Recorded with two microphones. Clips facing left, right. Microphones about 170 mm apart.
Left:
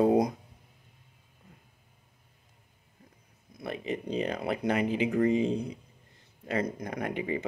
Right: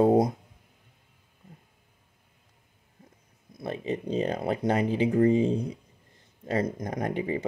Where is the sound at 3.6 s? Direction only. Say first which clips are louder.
Right 3 dB; 35° right (ahead or behind).